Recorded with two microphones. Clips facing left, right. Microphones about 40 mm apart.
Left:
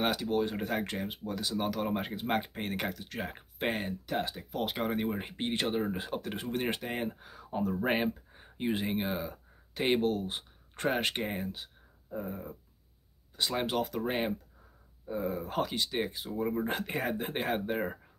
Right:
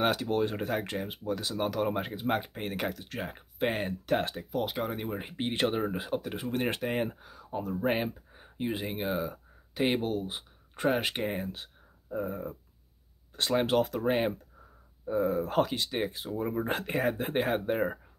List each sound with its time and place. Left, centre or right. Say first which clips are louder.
0.2 s speech: right 1 dB; centre
4.1 s speech: right 5 dB; right
4.4 s speech: right 2 dB; centre
5.5 s speech: right 3 dB; right
5.8 s speech: right 2 dB; centre
7.2 s speech: left 2 dB; centre
12.1 s speech: right 5 dB; centre
13.7 s speech: right 4 dB; centre